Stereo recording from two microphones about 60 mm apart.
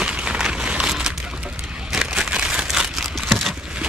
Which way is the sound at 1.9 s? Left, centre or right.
Centre.